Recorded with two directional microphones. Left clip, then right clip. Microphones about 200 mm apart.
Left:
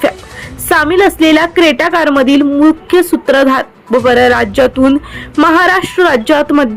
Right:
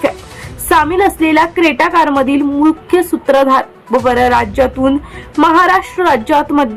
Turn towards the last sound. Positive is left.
turn(degrees=20)  # may be behind; listen again after turning